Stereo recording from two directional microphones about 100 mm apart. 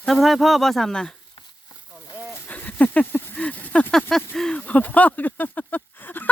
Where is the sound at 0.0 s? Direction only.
Centre (ahead or behind).